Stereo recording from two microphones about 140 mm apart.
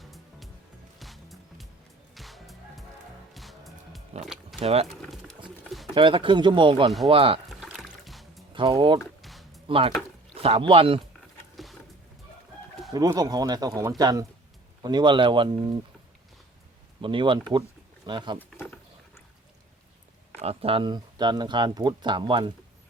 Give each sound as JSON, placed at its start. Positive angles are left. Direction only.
{"t": 0.0, "sound": "music", "side_deg": 0}
{"t": 4.6, "sound": "speech", "side_deg": -45}
{"t": 4.9, "sound": "pigeon", "side_deg": 0}
{"t": 5.6, "sound": "a sound", "side_deg": 0}
{"t": 5.9, "sound": "speech", "side_deg": -35}
{"t": 7.6, "sound": "music", "side_deg": 0}
{"t": 8.5, "sound": "speech", "side_deg": -35}
{"t": 9.2, "sound": "music", "side_deg": 0}
{"t": 9.6, "sound": "speech", "side_deg": -40}
{"t": 11.5, "sound": "a sound", "side_deg": 0}
{"t": 12.9, "sound": "speech", "side_deg": -25}
{"t": 17.0, "sound": "speech", "side_deg": -35}
{"t": 20.4, "sound": "speech", "side_deg": -45}